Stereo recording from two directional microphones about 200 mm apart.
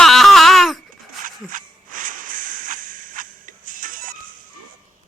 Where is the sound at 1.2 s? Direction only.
40° right (ahead or behind).